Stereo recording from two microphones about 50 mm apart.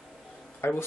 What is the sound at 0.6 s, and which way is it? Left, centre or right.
Speech, left.